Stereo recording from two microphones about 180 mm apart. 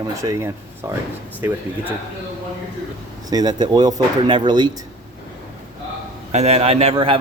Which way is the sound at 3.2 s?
20° right (ahead or behind).